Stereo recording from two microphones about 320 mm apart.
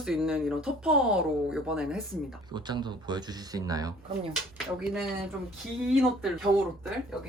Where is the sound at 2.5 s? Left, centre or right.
Centre.